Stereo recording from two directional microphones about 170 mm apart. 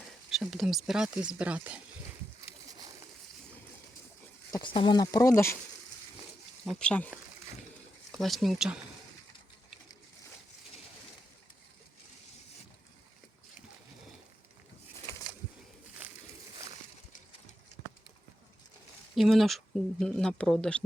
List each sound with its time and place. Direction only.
0.3 s speech: centre (ahead or behind)
4.5 s speech: 30° left (ahead or behind)
6.7 s speech: 5° left (ahead or behind)
8.2 s speech: centre (ahead or behind)
19.1 s speech: centre (ahead or behind)